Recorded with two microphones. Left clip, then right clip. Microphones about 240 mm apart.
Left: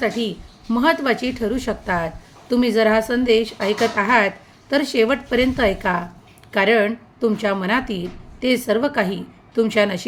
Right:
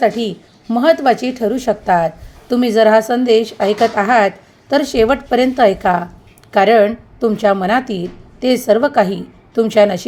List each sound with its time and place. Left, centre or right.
0.0 s a woman's voice: centre